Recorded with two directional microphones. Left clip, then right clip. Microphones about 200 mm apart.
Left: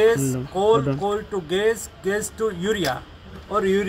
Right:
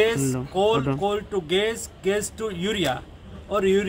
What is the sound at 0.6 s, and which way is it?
Speech, 5° right (ahead or behind).